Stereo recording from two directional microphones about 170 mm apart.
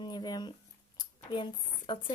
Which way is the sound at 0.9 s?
25° left (ahead or behind).